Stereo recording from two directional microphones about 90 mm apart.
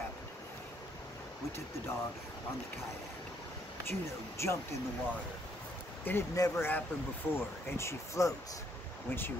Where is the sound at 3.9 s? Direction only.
30° left (ahead or behind).